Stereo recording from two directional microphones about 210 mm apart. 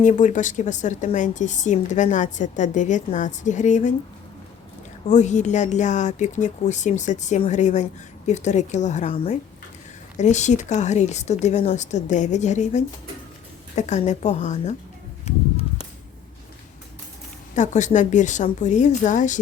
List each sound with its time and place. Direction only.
0.0 s speech: 35° left (ahead or behind)
5.0 s speech: 35° left (ahead or behind)
15.2 s a sound: 30° left (ahead or behind)
17.5 s speech: 35° left (ahead or behind)